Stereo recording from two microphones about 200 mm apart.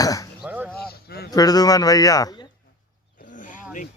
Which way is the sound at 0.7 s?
50° left (ahead or behind).